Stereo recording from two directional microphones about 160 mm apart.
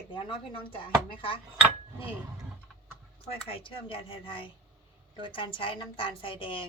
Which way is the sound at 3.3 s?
35° left (ahead or behind).